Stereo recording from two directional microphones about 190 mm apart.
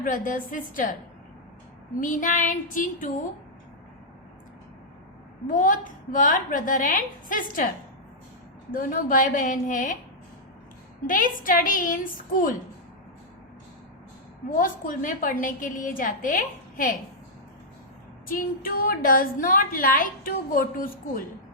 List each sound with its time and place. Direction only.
0.0 s a woman's voice: 45° left (ahead or behind)
2.0 s a woman's voice: 45° left (ahead or behind)
5.5 s a woman's voice: 45° left (ahead or behind)
8.7 s a woman's voice: 45° left (ahead or behind)
11.0 s a woman's voice: 45° left (ahead or behind)
14.5 s a woman's voice: 45° left (ahead or behind)
18.3 s a woman's voice: 45° left (ahead or behind)